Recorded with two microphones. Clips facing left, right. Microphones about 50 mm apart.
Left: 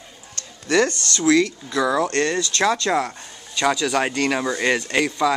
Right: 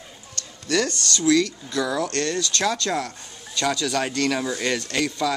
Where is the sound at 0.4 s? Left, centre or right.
Left.